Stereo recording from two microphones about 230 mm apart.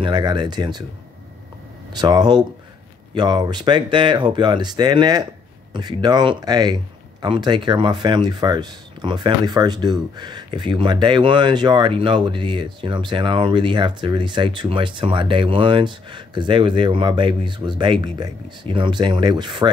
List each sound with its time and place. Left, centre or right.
0.0 s speech: centre
2.0 s speech: centre